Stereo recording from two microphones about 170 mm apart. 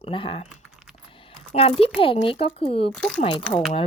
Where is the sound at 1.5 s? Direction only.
35° left (ahead or behind).